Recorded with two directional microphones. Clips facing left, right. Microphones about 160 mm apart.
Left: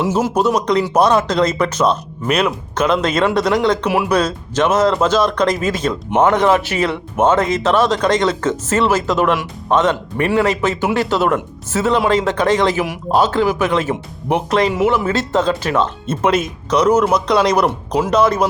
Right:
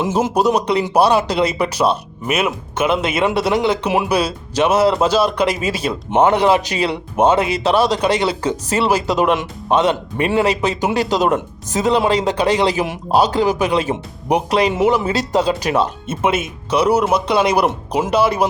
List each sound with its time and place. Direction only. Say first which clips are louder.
0.0 s speech: even; 15° right (ahead or behind)
6.1 s speech: even; 25° right (ahead or behind)
6.3 s speech: even; 15° right (ahead or behind)
13.8 s speech: even; 25° right (ahead or behind)
14.3 s speech: even; 15° right (ahead or behind)
17.7 s speech: left 1 dB; 20° right (ahead or behind)
18.1 s speech: left 1 dB; 10° right (ahead or behind)